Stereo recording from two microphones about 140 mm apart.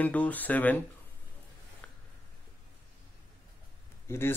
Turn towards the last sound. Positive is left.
turn(degrees=15)  # may be behind; listen again after turning